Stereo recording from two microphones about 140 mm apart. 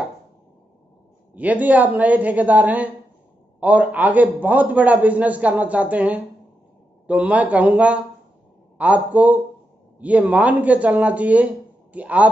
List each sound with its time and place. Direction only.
1.3 s a man's voice: 10° right (ahead or behind)